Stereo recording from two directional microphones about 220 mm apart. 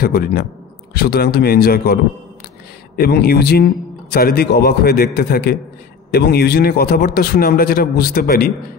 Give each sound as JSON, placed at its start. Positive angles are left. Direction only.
{"t": 0.0, "sound": "a man's voice", "side_deg": 45}
{"t": 3.0, "sound": "a man's voice", "side_deg": 45}